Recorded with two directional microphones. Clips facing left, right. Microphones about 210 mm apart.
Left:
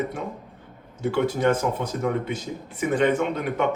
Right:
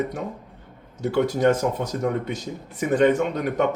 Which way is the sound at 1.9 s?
40° right (ahead or behind).